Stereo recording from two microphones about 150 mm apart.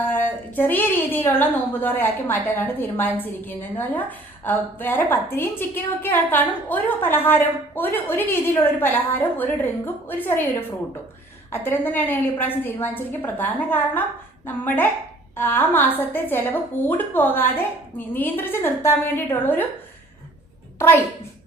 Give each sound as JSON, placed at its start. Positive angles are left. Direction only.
{"t": 0.0, "sound": "a woman's voice", "side_deg": 15}
{"t": 11.5, "sound": "a woman's voice", "side_deg": 15}
{"t": 20.7, "sound": "a woman's voice", "side_deg": 15}